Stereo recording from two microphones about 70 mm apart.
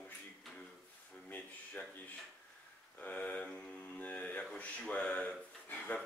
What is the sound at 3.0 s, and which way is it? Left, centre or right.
Speech, left.